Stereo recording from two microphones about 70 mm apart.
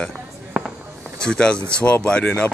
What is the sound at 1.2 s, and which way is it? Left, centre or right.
Speech, centre.